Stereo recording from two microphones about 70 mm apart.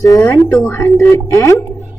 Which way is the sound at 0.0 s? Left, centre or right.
Left.